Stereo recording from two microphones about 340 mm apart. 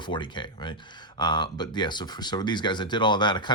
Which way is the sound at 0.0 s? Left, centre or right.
Centre.